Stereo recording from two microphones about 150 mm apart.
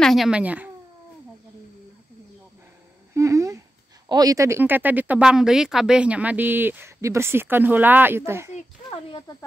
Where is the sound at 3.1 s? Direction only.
20° right (ahead or behind).